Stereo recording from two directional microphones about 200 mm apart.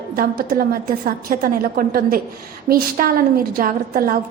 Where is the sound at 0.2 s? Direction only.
45° right (ahead or behind).